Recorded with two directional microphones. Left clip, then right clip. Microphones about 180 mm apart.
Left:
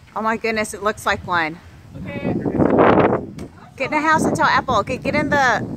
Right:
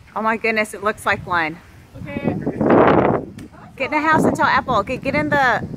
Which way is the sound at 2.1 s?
25° right (ahead or behind).